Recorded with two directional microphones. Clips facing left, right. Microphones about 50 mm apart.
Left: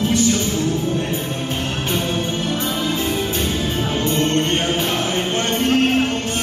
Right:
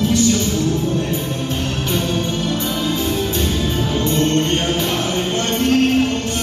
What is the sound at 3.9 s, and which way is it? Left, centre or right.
Music, left.